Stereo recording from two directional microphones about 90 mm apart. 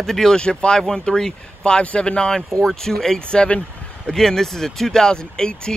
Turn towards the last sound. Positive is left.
turn(degrees=10)  # may be behind; listen again after turning